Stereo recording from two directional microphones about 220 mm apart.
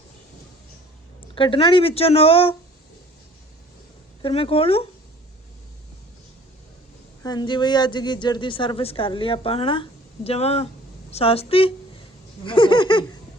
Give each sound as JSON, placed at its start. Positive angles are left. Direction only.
{"t": 1.4, "sound": "speech", "side_deg": 25}
{"t": 4.2, "sound": "speech", "side_deg": 25}
{"t": 7.2, "sound": "speech", "side_deg": 20}